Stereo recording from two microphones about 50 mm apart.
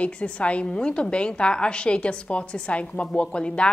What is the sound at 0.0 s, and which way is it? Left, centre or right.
A woman's voice, left.